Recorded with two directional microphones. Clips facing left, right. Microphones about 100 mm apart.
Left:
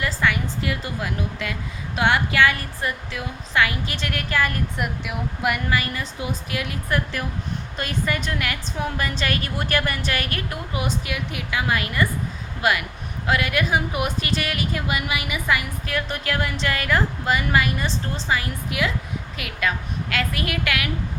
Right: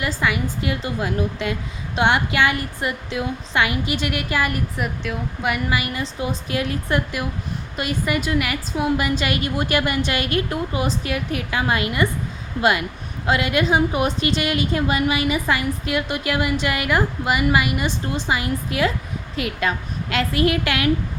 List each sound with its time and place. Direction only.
0.0 s a woman's voice: 15° right (ahead or behind)
4.8 s speech: centre (ahead or behind)
5.6 s a woman's voice: 15° right (ahead or behind)
6.0 s a woman's voice: 30° right (ahead or behind)
7.8 s a woman's voice: 10° right (ahead or behind); by 11.6 s 40° right (ahead or behind)
11.7 s a woman's voice: 20° right (ahead or behind)
13.2 s a woman's voice: 25° right (ahead or behind)
15.9 s a woman's voice: 15° right (ahead or behind)
18.7 s a woman's voice: 35° right (ahead or behind)